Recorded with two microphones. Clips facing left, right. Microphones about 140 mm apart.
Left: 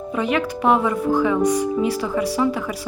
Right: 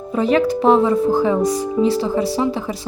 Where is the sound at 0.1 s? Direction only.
35° right (ahead or behind).